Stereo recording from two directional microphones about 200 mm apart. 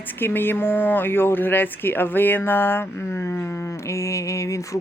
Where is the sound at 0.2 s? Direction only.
10° left (ahead or behind).